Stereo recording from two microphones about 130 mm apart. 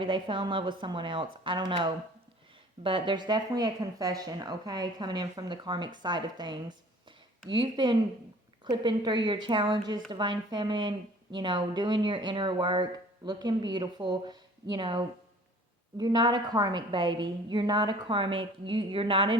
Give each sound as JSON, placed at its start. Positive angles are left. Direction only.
{"t": 0.0, "sound": "a woman's voice", "side_deg": -40}